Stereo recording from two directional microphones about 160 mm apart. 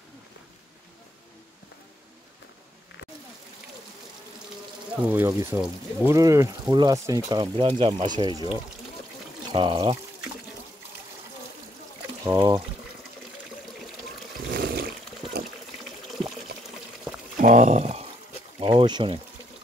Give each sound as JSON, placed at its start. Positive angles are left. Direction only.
{"t": 5.0, "sound": "speech", "side_deg": -15}
{"t": 9.5, "sound": "speech", "side_deg": -30}
{"t": 12.4, "sound": "speech", "side_deg": -30}
{"t": 14.5, "sound": "roar", "side_deg": -70}
{"t": 16.1, "sound": "water", "side_deg": 0}
{"t": 17.4, "sound": "speech", "side_deg": -50}